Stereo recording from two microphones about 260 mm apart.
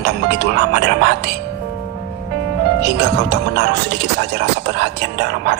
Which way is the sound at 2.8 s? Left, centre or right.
Right.